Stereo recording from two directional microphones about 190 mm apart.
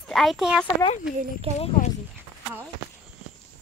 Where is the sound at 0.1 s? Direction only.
Centre (ahead or behind).